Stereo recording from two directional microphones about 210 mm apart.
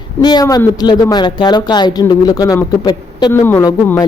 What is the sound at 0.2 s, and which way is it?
Speech, 20° left (ahead or behind).